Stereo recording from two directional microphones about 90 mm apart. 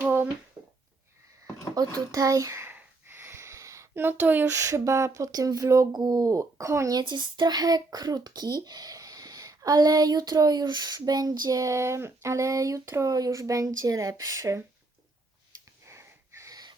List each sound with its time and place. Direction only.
0.0 s a sound: 20° right (ahead or behind)
1.7 s speech: 40° right (ahead or behind)
2.6 s a sound: 25° right (ahead or behind)
4.4 s speech: 35° right (ahead or behind)
5.9 s speech: 50° right (ahead or behind)
7.0 s speech: 55° right (ahead or behind); by 14.6 s 35° right (ahead or behind)
15.8 s wheeze: 30° right (ahead or behind)